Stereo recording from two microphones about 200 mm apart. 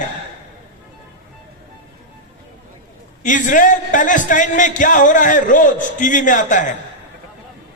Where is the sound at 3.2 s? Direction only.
40° left (ahead or behind).